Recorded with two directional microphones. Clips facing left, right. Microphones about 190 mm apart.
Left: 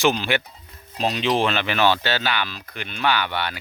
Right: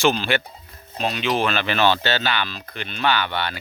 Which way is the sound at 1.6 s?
10° left (ahead or behind).